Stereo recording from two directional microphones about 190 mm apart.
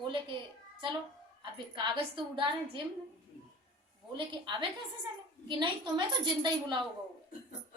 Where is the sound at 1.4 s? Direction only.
25° right (ahead or behind).